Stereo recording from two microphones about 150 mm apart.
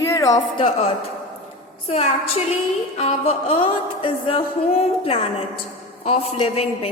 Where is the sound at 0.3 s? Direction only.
40° left (ahead or behind).